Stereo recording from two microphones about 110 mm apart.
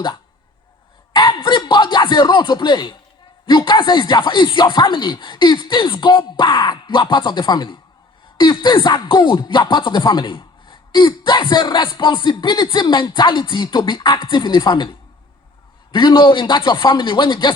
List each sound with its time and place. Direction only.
1.1 s speech: 45° left (ahead or behind)